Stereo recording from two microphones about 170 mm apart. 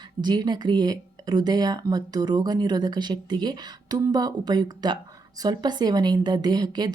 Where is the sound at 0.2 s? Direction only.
25° right (ahead or behind).